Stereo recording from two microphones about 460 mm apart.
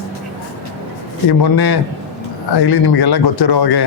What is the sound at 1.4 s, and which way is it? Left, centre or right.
Speech, left.